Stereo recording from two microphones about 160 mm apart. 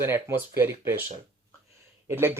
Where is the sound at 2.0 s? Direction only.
15° right (ahead or behind).